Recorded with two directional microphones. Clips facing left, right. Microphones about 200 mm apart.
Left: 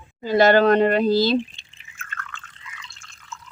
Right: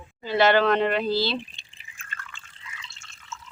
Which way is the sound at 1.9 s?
30° right (ahead or behind).